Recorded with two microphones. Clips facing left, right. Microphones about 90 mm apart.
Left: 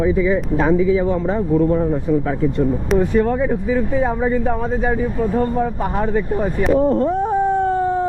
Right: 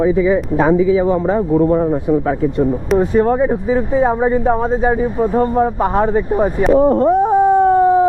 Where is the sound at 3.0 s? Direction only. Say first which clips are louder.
Right 4 dB; 30° right (ahead or behind).